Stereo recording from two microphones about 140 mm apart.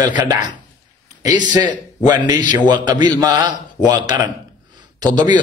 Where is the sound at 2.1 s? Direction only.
30° right (ahead or behind).